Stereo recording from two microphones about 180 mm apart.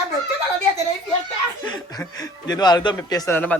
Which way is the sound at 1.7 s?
20° left (ahead or behind).